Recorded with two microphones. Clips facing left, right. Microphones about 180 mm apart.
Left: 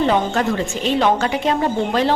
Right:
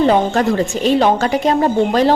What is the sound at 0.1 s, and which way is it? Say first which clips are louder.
A woman's voice: right 4 dB; 35° right (ahead or behind).